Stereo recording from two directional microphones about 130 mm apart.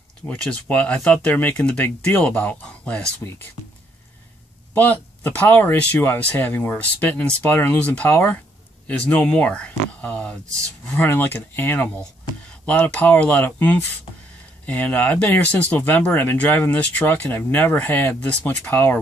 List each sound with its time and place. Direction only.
0.3 s speech: 10° left (ahead or behind)
4.7 s speech: 15° left (ahead or behind)